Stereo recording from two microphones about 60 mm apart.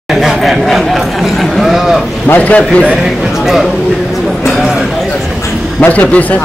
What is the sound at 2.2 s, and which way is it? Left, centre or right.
Speech, left.